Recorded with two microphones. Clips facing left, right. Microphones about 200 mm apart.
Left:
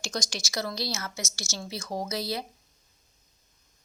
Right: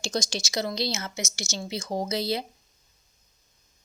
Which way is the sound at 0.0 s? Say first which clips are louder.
Right 5 dB; 25° right (ahead or behind).